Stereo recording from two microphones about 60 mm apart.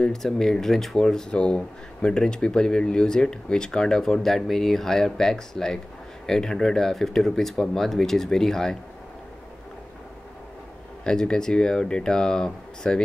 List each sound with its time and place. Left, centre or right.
0.0 s speech: centre
1.3 s speech: centre
11.1 s speech: centre